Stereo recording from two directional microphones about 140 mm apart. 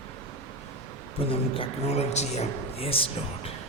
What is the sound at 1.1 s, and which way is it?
Speech, 45° left (ahead or behind).